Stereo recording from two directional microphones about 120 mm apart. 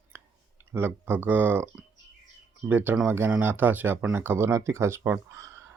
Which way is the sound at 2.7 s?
15° right (ahead or behind).